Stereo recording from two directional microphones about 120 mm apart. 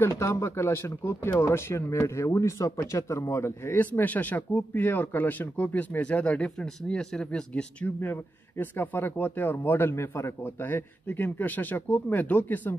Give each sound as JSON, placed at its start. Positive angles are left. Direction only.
{"t": 0.2, "sound": "speech", "side_deg": 25}